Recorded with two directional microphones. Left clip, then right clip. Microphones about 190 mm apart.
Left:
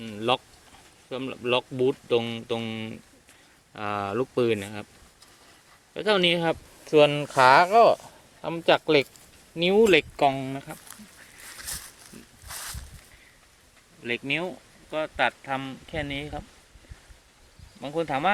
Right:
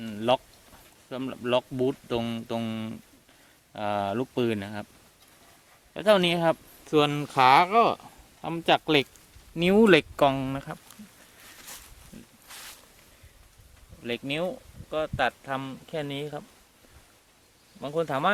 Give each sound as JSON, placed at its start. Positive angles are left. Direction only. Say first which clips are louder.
{"t": 0.0, "sound": "a sound", "louder": "right 1 dB", "side_deg": -25}
{"t": 1.1, "sound": "speech", "louder": "left 1 dB", "side_deg": -25}
{"t": 5.9, "sound": "speech", "louder": "right 1 dB", "side_deg": -30}
{"t": 14.0, "sound": "speech", "louder": "left 2 dB", "side_deg": -25}
{"t": 17.7, "sound": "speech", "louder": "even", "side_deg": -25}